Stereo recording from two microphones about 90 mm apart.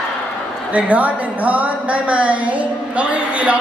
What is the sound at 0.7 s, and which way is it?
A woman's voice, 15° right (ahead or behind).